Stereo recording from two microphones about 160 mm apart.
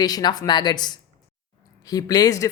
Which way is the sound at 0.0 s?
25° left (ahead or behind).